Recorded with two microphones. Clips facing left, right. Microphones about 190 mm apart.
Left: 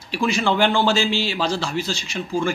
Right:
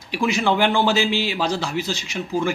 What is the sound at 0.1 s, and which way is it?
A man's voice, 15° right (ahead or behind).